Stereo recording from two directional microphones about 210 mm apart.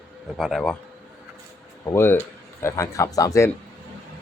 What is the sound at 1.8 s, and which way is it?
A man's voice, 10° left (ahead or behind).